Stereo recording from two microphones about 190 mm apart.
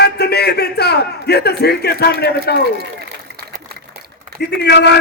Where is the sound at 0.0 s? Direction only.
60° left (ahead or behind).